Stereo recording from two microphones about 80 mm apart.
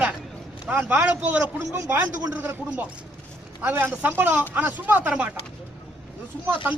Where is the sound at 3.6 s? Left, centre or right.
Right.